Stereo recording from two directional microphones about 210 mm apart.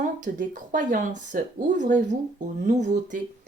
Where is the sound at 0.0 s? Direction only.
40° right (ahead or behind).